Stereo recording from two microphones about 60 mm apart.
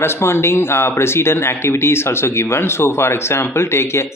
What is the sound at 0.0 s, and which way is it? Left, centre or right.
Speech, left.